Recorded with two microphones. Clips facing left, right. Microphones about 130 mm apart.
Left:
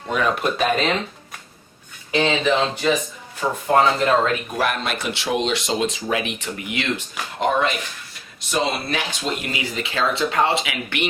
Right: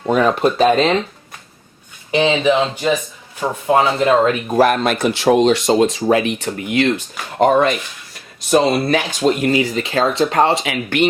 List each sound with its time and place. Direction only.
0.1 s speech: 35° right (ahead or behind)
2.1 s speech: 10° right (ahead or behind)
4.4 s speech: 40° right (ahead or behind)